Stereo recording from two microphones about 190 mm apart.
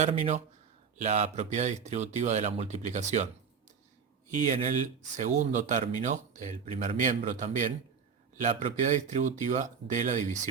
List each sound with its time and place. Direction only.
0.0 s speech: 40° right (ahead or behind)
5.1 s speech: 40° right (ahead or behind)